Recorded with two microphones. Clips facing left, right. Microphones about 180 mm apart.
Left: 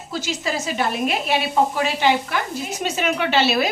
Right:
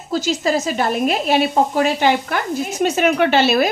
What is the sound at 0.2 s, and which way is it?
Speech, 45° right (ahead or behind).